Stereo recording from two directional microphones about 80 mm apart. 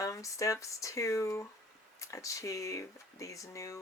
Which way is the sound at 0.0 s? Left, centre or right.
Left.